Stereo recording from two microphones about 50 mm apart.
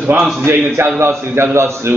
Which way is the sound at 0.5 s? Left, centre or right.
Right.